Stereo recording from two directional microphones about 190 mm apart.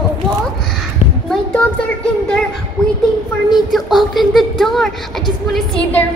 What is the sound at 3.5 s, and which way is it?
Speech, centre (ahead or behind).